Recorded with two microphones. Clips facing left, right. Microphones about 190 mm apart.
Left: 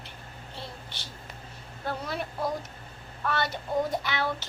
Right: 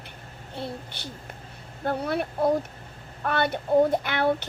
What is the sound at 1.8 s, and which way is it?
A child's voice, 60° right (ahead or behind).